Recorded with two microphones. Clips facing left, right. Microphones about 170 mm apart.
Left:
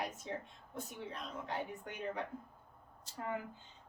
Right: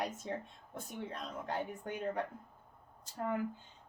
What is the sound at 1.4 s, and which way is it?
Speech, 50° right (ahead or behind).